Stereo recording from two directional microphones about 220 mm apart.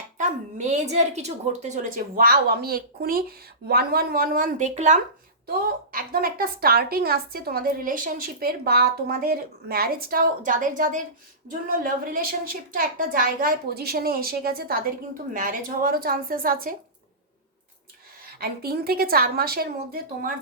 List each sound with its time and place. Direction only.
0.2 s a woman's voice: 35° right (ahead or behind)
5.5 s a woman's voice: 40° right (ahead or behind)
18.3 s a woman's voice: 45° right (ahead or behind)